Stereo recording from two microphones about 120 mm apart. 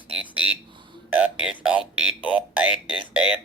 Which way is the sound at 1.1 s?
10° right (ahead or behind).